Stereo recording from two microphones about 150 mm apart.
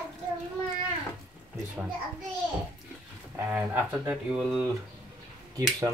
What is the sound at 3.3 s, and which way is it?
Speech, 10° right (ahead or behind).